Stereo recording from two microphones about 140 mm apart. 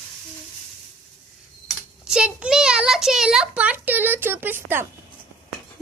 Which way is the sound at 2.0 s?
5° right (ahead or behind).